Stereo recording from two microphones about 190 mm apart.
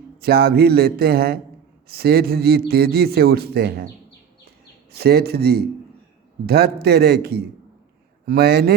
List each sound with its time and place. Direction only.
0.2 s a man's voice: 55° right (ahead or behind)
4.9 s a man's voice: 55° right (ahead or behind)